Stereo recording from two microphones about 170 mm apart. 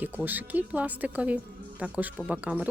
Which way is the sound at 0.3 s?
10° right (ahead or behind).